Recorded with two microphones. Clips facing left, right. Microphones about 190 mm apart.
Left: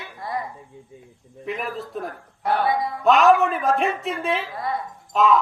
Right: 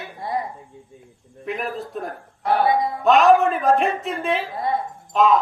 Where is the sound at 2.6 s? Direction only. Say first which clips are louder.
Right 5 dB; 25° right (ahead or behind).